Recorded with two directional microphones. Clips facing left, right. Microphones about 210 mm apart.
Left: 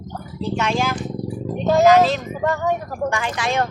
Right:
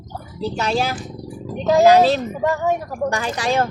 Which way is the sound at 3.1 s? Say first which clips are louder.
Right 3 dB; 35° right (ahead or behind).